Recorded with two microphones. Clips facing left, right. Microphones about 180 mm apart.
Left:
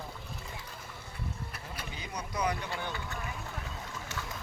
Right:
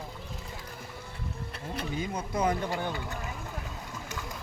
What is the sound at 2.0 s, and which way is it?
Speech, 50° right (ahead or behind).